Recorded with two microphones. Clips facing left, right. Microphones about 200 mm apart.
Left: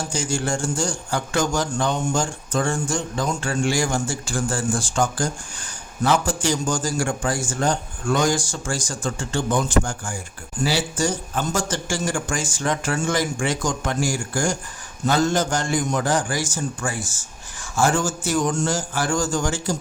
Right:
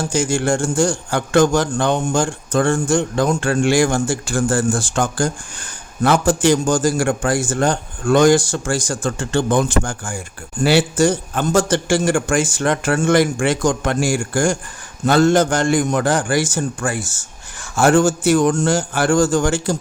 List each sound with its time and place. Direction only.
0.1 s a man's voice: 60° right (ahead or behind)